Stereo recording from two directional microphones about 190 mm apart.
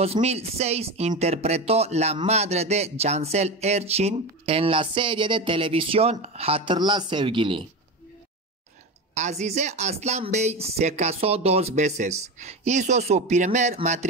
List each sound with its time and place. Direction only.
0.0 s speech: 35° right (ahead or behind)
9.1 s speech: 35° right (ahead or behind)